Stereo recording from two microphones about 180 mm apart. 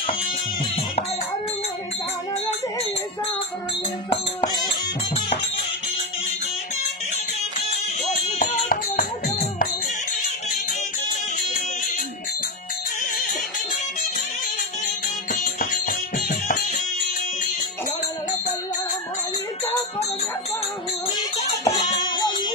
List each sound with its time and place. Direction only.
4.1 s music: 30° left (ahead or behind)
8.4 s music: 50° left (ahead or behind)
15.3 s music: 55° left (ahead or behind)
21.6 s music: 25° left (ahead or behind)